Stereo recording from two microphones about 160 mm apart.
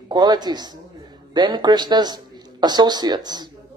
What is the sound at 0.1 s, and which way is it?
A woman's voice, 25° right (ahead or behind).